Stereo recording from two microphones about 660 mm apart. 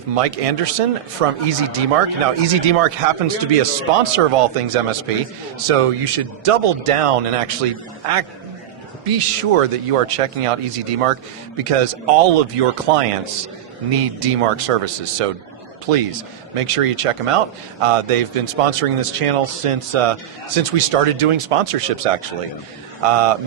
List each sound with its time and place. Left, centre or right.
0.2 s a man's voice: right